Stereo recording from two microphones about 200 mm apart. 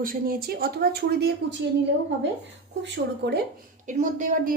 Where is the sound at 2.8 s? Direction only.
55° right (ahead or behind).